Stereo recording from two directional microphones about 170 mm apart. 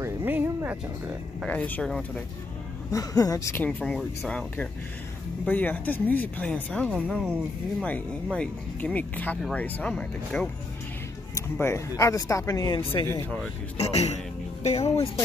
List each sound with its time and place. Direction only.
0.0 s music: 10° right (ahead or behind)
1.4 s speech: 10° left (ahead or behind)
2.9 s speech: 20° left (ahead or behind)
11.5 s speech: 15° left (ahead or behind)
13.7 s speech: 40° left (ahead or behind)